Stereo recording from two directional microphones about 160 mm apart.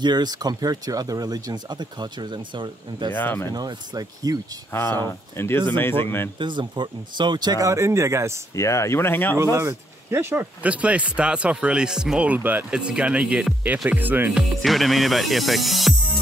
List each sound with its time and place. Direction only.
0.0 s speech: 25° right (ahead or behind)
3.2 s speech: 10° left (ahead or behind)
3.5 s speech: 25° right (ahead or behind)
4.7 s speech: 15° left (ahead or behind)
6.4 s speech: 30° right (ahead or behind)
8.5 s speech: 20° left (ahead or behind)
9.4 s speech: 15° right (ahead or behind)
14.6 s speech: centre (ahead or behind)